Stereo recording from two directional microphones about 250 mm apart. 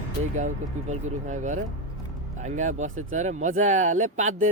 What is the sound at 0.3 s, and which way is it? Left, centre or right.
Speech, right.